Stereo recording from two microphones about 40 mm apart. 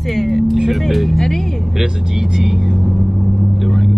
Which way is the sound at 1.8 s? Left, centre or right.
Centre.